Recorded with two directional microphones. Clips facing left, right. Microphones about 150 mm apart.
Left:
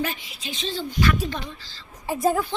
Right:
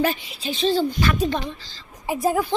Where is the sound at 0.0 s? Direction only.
35° right (ahead or behind).